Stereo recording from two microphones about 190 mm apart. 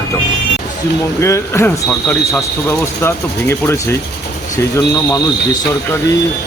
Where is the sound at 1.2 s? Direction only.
15° left (ahead or behind).